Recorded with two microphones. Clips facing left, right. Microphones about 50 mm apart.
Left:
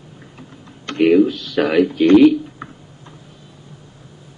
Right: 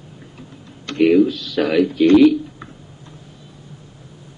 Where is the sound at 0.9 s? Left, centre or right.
Centre.